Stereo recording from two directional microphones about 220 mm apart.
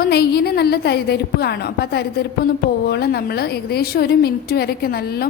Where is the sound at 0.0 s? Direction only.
45° left (ahead or behind).